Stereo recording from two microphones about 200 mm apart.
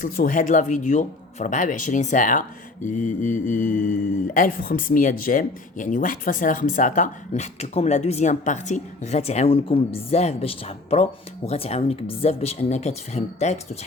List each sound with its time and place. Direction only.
0.0 s speech: 40° left (ahead or behind)